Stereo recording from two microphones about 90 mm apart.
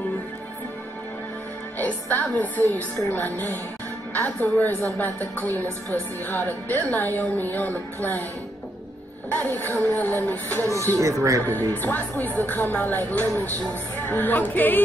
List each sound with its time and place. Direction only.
1.8 s a woman's voice: 20° left (ahead or behind)
9.3 s a woman's voice: 20° left (ahead or behind)
11.0 s speech: 35° right (ahead or behind)
11.7 s a woman's voice: 20° left (ahead or behind)